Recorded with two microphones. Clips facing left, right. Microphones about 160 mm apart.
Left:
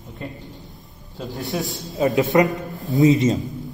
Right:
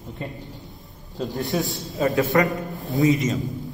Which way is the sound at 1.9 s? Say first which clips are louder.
Left 3 dB; 20° left (ahead or behind).